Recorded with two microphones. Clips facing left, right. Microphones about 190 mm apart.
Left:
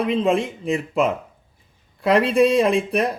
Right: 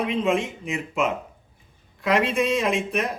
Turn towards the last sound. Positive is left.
turn(degrees=35)  # may be behind; listen again after turning